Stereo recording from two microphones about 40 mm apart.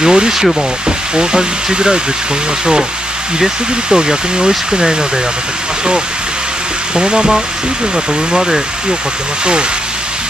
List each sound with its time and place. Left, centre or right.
0.0 s speech: centre
3.3 s speech: centre
7.0 s speech: right